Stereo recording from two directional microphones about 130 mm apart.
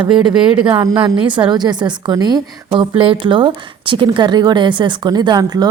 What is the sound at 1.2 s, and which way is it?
A woman's voice, 40° right (ahead or behind).